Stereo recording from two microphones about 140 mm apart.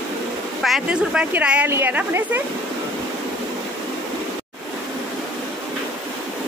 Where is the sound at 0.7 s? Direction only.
5° right (ahead or behind).